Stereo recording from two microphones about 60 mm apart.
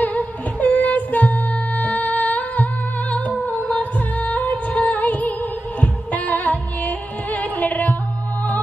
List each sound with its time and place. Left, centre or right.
0.0 s music: left